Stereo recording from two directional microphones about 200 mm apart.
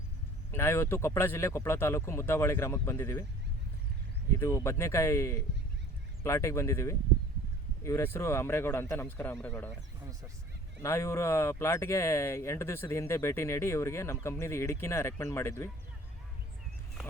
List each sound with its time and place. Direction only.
0.5 s speech: 10° left (ahead or behind)
4.4 s speech: 15° left (ahead or behind)
10.8 s speech: 15° left (ahead or behind)